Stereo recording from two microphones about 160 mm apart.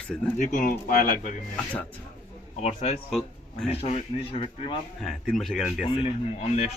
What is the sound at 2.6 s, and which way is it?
Speech, 45° left (ahead or behind).